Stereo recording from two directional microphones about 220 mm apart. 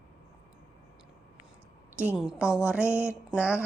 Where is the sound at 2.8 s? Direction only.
10° left (ahead or behind).